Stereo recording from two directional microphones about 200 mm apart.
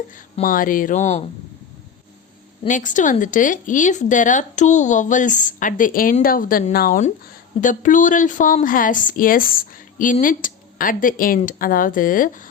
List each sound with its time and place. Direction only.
0.1 s speech: 45° left (ahead or behind)
2.6 s speech: 40° left (ahead or behind)